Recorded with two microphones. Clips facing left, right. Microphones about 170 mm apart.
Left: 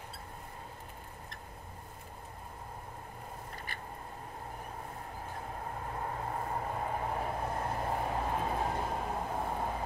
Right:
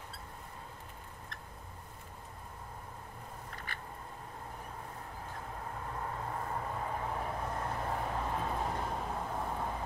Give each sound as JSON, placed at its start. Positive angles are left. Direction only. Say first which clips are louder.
{"t": 6.0, "sound": "vehicle", "louder": "left 2 dB", "side_deg": 30}
{"t": 6.8, "sound": "vehicle", "louder": "left 2 dB", "side_deg": 15}